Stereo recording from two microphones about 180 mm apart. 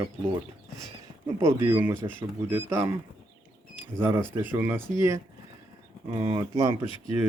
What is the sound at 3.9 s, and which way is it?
Speech, 15° right (ahead or behind).